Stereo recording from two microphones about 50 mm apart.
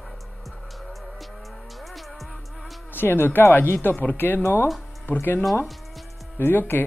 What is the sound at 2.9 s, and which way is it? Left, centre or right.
Speech, left.